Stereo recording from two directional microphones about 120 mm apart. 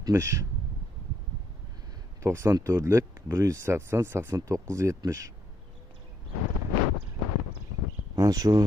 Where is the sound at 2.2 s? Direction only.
25° right (ahead or behind).